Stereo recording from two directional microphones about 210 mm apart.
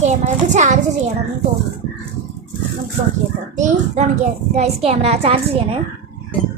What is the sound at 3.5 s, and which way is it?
A child's voice, 35° right (ahead or behind).